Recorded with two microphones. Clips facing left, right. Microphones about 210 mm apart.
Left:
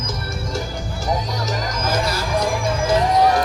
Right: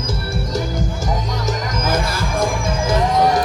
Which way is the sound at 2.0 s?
50° right (ahead or behind).